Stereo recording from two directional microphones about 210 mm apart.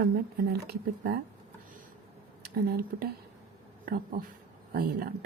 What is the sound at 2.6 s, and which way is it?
Speech, 45° right (ahead or behind).